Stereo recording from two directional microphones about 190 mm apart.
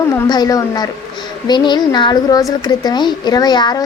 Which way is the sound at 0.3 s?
20° left (ahead or behind).